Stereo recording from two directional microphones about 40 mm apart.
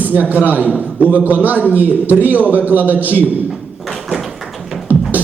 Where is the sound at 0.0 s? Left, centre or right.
Right.